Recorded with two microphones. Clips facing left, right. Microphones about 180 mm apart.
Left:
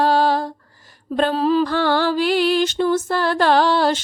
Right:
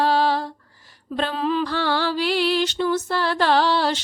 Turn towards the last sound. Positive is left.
turn(degrees=50)  # may be behind; listen again after turning